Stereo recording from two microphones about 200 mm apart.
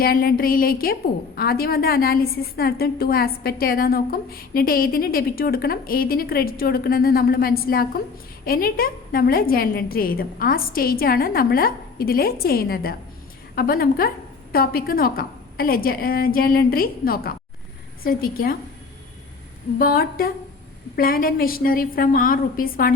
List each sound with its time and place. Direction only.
0.0 s a woman's voice: 45° left (ahead or behind)
19.8 s a woman's voice: 45° left (ahead or behind)